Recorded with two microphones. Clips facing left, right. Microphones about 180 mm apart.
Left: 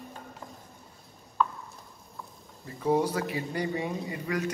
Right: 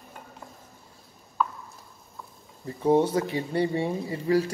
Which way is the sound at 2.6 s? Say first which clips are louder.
Right 4 dB; 25° right (ahead or behind).